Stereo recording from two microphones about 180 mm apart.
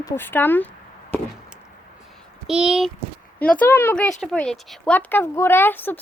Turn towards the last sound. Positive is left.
turn(degrees=10)  # may be behind; listen again after turning